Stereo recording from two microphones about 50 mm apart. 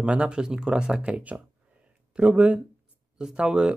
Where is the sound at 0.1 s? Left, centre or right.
Right.